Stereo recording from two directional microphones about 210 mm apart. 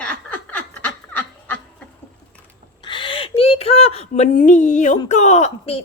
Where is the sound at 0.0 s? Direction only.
5° left (ahead or behind).